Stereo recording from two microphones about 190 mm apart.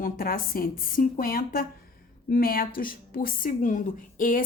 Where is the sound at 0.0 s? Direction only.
45° left (ahead or behind).